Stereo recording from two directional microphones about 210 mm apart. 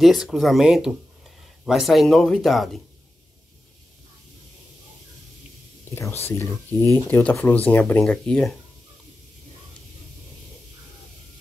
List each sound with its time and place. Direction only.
0.0 s speech: centre (ahead or behind)
6.2 s speech: 10° left (ahead or behind)